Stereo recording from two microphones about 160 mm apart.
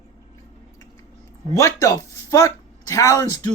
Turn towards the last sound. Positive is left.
turn(degrees=20)  # may be behind; listen again after turning